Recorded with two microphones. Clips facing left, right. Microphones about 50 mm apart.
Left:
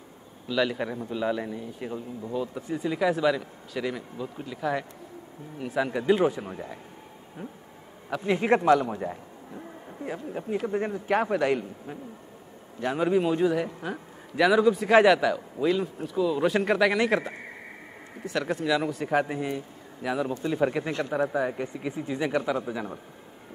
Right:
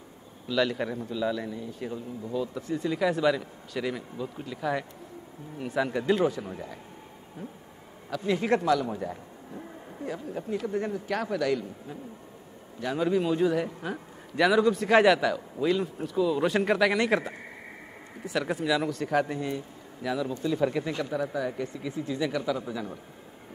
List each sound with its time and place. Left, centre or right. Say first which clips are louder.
0.5 s speech: even; centre
1.0 s speech: left 3 dB; left; by 6.2 s centre
6.2 s speech: left 2 dB; left
8.1 s speech: left 2 dB; left
8.8 s a man's voice: left 1 dB; centre
18.8 s speech: left 1 dB; centre